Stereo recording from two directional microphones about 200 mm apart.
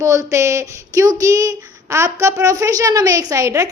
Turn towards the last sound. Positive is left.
turn(degrees=-15)  # may be behind; listen again after turning